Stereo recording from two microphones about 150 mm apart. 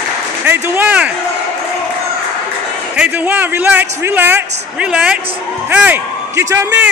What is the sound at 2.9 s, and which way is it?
Speech, 10° right (ahead or behind).